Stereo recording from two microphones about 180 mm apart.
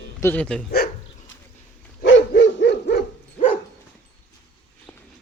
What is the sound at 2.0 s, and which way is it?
Dog, 80° left.